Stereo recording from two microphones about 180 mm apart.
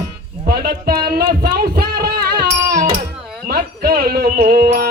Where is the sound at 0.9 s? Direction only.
60° right (ahead or behind).